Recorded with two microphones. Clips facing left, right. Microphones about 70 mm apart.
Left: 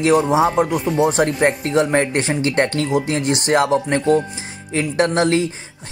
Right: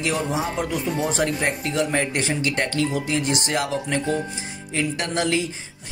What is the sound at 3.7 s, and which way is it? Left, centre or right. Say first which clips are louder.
Speech: left 8 dB; left.